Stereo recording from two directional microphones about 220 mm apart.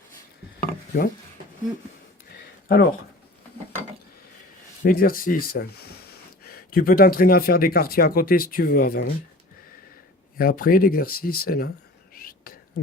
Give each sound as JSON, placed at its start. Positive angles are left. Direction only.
{"t": 0.6, "sound": "chopping", "side_deg": 40}
{"t": 2.3, "sound": "a sound", "side_deg": 45}
{"t": 4.8, "sound": "speech", "side_deg": 40}
{"t": 10.3, "sound": "speech", "side_deg": 40}
{"t": 12.1, "sound": "whispering", "side_deg": 40}